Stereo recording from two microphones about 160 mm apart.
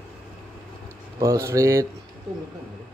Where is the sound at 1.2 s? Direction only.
20° right (ahead or behind).